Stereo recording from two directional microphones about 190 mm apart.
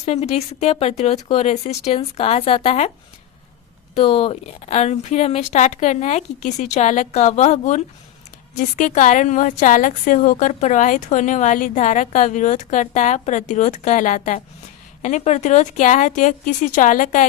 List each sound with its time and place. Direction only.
0.0 s a woman's voice: 35° left (ahead or behind)
3.9 s a woman's voice: 30° left (ahead or behind)